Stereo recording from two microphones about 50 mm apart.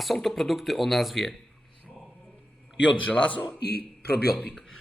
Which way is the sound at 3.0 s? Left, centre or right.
Left.